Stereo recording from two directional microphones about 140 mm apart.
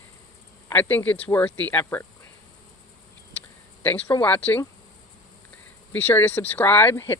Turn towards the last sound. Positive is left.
turn(degrees=15)  # may be behind; listen again after turning